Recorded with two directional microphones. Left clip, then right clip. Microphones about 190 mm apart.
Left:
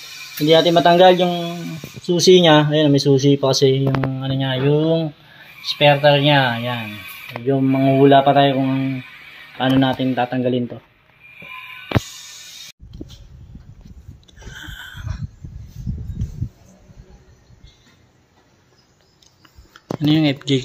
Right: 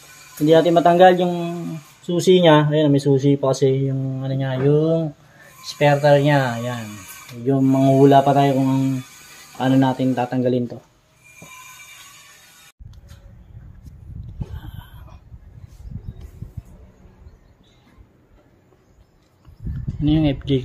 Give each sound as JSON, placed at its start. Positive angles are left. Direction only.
{"t": 0.5, "sound": "speech", "side_deg": 20}
{"t": 14.2, "sound": "a sound", "side_deg": 5}
{"t": 19.7, "sound": "speech", "side_deg": 5}